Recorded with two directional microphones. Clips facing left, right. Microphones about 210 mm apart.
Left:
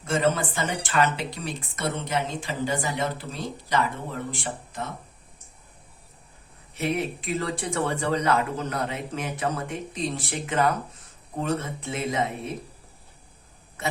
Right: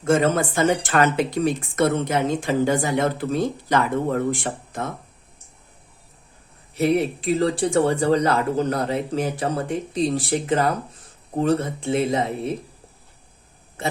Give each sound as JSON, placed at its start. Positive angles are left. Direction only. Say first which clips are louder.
{"t": 0.0, "sound": "speech", "louder": "right 5 dB", "side_deg": -50}
{"t": 6.7, "sound": "speech", "louder": "right 7 dB", "side_deg": -35}
{"t": 13.8, "sound": "speech", "louder": "right 4 dB", "side_deg": -30}